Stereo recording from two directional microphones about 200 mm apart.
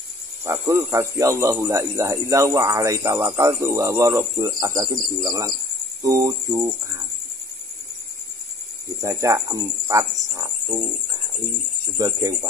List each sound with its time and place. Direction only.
0.5 s speech: 15° right (ahead or behind)
9.0 s speech: 15° right (ahead or behind)